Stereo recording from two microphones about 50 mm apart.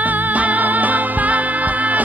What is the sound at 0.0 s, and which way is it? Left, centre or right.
Music, right.